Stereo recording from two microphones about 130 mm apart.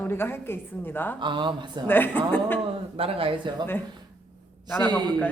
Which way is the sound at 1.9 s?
15° left (ahead or behind).